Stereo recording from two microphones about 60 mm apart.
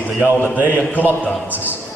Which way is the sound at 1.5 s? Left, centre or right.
Right.